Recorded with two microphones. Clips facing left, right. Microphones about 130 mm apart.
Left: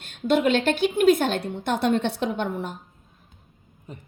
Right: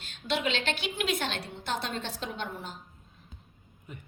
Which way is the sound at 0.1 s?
50° left (ahead or behind).